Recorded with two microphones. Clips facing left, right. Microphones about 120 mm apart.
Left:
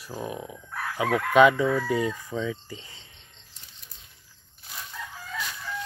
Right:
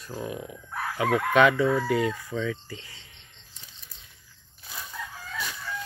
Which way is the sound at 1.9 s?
20° left (ahead or behind).